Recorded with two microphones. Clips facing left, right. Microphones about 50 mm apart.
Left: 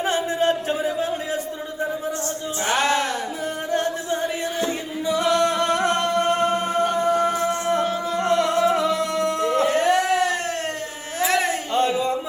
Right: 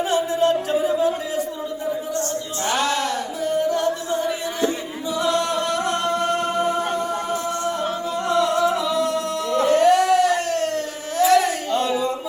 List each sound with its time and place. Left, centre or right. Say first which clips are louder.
0.0 s music: right 2 dB; left
2.6 s music: left 1 dB; left
5.1 s a capella: left 1 dB; left
8.3 s singing: even; left
11.2 s a sound: right 5 dB; left